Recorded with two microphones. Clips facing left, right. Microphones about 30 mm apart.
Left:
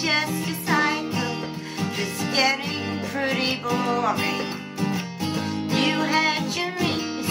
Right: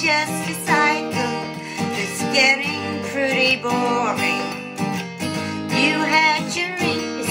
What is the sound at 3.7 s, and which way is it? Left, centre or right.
Music, right.